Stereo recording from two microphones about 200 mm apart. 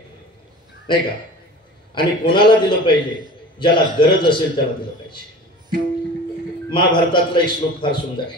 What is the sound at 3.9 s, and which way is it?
Speech, 25° left (ahead or behind).